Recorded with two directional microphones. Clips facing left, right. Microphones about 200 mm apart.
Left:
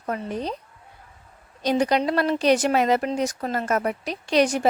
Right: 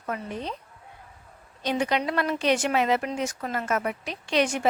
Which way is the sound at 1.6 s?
40° left (ahead or behind).